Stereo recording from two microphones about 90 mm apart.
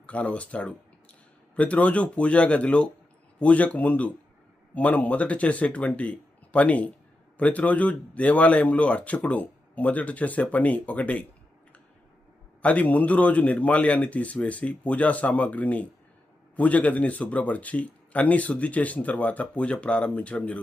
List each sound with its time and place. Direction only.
0.0 s a man's voice: 15° left (ahead or behind)
12.6 s a man's voice: 15° left (ahead or behind)